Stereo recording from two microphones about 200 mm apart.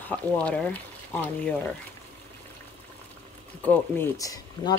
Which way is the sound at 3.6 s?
10° left (ahead or behind).